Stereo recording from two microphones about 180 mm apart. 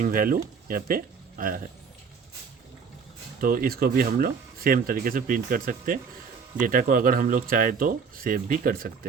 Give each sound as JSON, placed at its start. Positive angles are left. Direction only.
{"t": 0.0, "sound": "speech", "side_deg": -50}
{"t": 3.4, "sound": "speech", "side_deg": -50}